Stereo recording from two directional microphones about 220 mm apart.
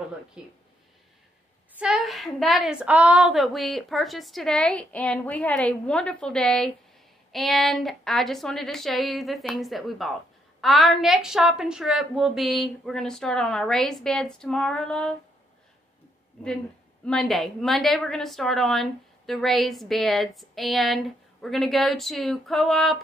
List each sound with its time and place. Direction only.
0.4 s a woman's voice: 5° right (ahead or behind)
1.8 s a woman's voice: centre (ahead or behind)
17.0 s a woman's voice: centre (ahead or behind)